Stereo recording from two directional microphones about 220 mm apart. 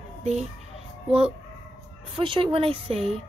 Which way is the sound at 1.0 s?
25° right (ahead or behind).